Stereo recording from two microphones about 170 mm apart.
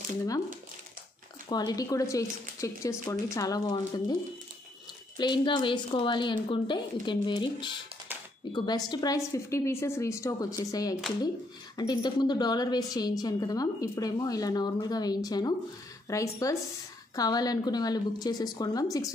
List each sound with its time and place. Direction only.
1.5 s a woman's voice: 20° left (ahead or behind)